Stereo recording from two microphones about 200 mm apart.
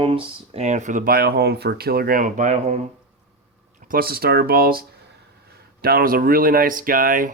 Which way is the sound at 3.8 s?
45° right (ahead or behind).